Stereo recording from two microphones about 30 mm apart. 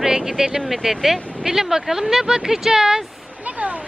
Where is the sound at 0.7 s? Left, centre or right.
Centre.